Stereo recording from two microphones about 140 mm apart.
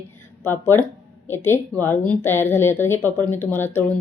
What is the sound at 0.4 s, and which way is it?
A woman's voice, 15° left (ahead or behind).